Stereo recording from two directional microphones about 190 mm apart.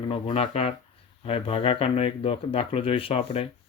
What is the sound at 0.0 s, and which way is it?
Speech, 30° left (ahead or behind).